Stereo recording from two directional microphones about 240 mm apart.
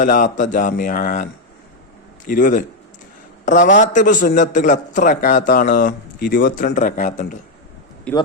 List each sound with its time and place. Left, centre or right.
0.0 s a man's voice: left
8.1 s speech: centre